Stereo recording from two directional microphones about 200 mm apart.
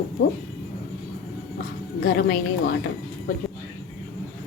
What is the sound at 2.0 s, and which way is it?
Speech, 50° left (ahead or behind).